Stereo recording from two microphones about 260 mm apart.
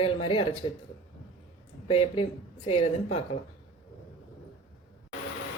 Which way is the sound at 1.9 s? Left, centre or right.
Left.